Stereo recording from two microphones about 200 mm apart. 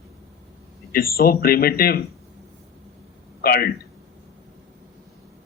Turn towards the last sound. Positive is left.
turn(degrees=50)  # may be behind; listen again after turning